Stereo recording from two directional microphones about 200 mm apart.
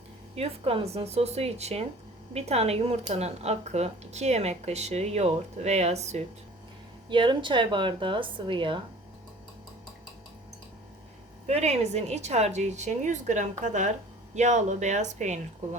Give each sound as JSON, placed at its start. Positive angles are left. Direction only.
{"t": 0.3, "sound": "speech", "side_deg": -30}
{"t": 11.4, "sound": "speech", "side_deg": -35}